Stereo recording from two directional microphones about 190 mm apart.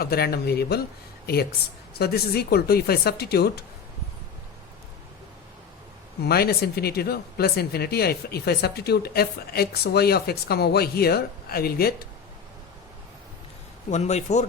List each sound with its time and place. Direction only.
0.0 s speech: 55° left (ahead or behind)
2.0 s speech: 55° left (ahead or behind)
6.2 s speech: 55° left (ahead or behind)
13.9 s speech: 35° left (ahead or behind)